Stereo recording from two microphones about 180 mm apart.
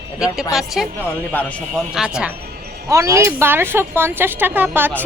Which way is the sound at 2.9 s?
15° right (ahead or behind).